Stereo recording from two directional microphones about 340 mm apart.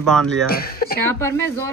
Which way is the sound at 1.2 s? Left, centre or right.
Centre.